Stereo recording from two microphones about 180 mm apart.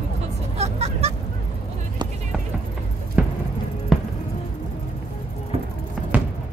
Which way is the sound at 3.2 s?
5° right (ahead or behind).